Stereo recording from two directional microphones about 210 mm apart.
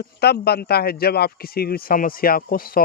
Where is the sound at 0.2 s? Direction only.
50° left (ahead or behind).